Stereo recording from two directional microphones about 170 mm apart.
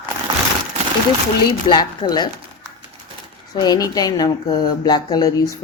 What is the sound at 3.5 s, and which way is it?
Speech, 20° left (ahead or behind).